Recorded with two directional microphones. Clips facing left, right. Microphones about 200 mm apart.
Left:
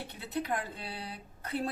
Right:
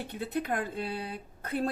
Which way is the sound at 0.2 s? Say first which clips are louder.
Right 3 dB; 50° right (ahead or behind).